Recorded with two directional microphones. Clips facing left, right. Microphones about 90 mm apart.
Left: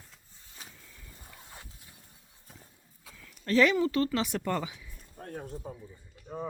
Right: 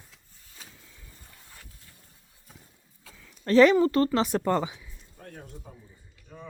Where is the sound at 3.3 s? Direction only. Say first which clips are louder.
Right 6 dB; 35° right (ahead or behind).